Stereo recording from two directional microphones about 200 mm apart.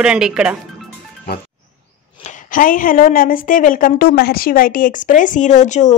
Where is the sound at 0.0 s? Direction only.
5° right (ahead or behind).